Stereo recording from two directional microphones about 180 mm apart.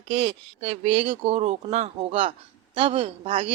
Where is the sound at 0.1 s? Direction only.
30° right (ahead or behind).